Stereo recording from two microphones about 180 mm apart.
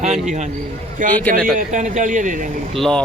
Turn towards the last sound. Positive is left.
turn(degrees=5)  # may be behind; listen again after turning